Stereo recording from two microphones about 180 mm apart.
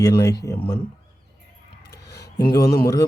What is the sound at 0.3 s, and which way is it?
Speech, 15° left (ahead or behind).